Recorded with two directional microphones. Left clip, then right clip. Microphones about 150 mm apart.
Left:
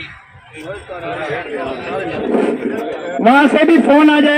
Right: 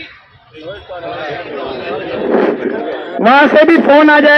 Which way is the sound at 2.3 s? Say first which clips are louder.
Right 4 dB; 35° right (ahead or behind).